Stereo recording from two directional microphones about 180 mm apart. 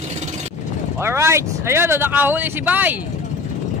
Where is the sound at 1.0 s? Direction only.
15° right (ahead or behind).